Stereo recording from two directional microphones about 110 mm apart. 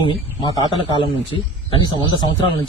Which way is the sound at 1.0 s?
55° left (ahead or behind).